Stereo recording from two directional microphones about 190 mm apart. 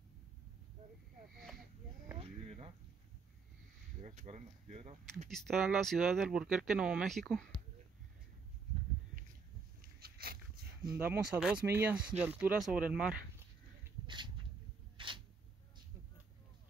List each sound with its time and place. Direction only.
1.3 s speech: centre (ahead or behind)
2.1 s a sound: 30° right (ahead or behind)
4.0 s speech: 40° right (ahead or behind)
5.3 s speech: centre (ahead or behind)
9.8 s dog: 55° right (ahead or behind)
11.0 s speech: 5° right (ahead or behind)
14.0 s a sound: 25° right (ahead or behind)